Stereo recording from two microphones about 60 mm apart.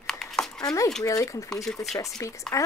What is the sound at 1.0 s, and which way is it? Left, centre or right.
Speech, left.